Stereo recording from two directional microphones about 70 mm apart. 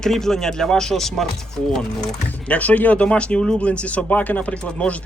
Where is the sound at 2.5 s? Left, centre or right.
Left.